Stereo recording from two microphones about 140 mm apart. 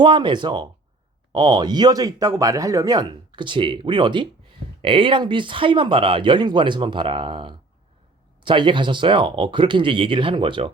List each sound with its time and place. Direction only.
0.0 s speech: 35° right (ahead or behind)